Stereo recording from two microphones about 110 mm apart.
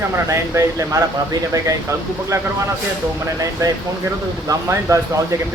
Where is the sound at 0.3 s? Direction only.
30° right (ahead or behind).